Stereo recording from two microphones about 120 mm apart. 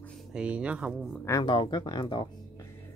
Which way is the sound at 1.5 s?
40° left (ahead or behind).